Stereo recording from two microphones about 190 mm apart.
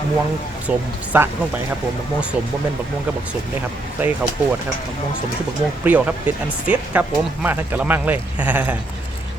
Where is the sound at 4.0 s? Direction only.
10° right (ahead or behind).